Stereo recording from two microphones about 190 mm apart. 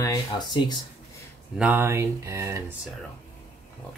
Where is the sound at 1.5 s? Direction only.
10° right (ahead or behind).